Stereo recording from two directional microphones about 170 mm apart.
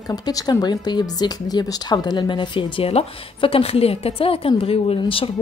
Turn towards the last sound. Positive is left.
turn(degrees=30)  # may be behind; listen again after turning